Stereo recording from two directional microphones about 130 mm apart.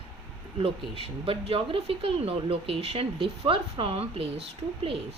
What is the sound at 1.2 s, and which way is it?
Speech, 45° right (ahead or behind).